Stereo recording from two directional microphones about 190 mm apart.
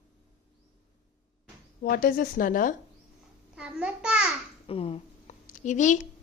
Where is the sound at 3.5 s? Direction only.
5° right (ahead or behind).